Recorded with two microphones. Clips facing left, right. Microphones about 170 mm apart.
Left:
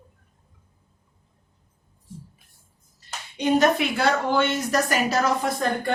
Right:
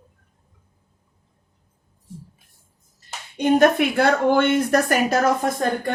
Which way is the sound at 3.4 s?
55° right (ahead or behind).